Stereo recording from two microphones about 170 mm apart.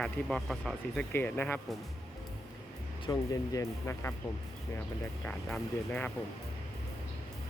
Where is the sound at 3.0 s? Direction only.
20° left (ahead or behind).